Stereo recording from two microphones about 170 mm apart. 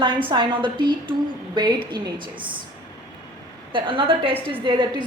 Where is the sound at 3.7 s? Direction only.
30° right (ahead or behind).